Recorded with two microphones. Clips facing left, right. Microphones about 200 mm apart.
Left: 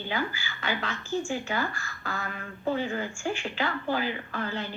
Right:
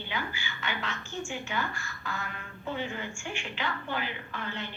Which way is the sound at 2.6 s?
35° left (ahead or behind).